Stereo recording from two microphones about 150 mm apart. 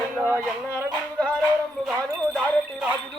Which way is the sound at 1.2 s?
10° left (ahead or behind).